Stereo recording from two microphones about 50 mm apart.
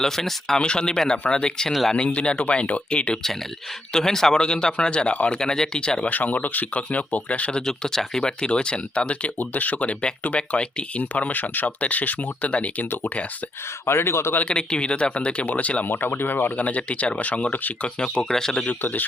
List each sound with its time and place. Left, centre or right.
0.0 s speech: centre; by 3.2 s left
3.9 s speech: centre
6.1 s speech: left
7.6 s speech: centre
11.1 s speech: left
13.8 s speech: left
14.4 s speech: centre
15.9 s speech: left
16.6 s speech: left
17.8 s speech: centre
18.6 s speech: left